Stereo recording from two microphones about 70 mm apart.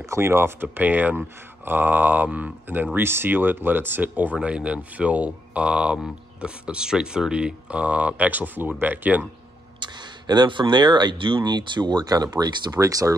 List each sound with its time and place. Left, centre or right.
0.1 s speech: right
9.8 s speech: right
12.7 s speech: right